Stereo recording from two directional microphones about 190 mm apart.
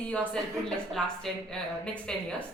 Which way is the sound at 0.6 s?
5° left (ahead or behind).